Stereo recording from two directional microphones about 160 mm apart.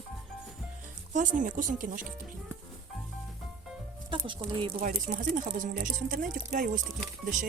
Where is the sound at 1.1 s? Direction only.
55° right (ahead or behind).